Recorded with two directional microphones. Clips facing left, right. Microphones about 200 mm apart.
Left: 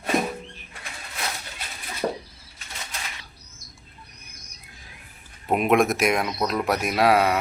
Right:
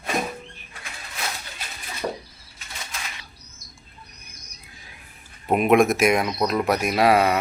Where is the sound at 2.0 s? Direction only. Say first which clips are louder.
Left 2 dB; 40° left (ahead or behind).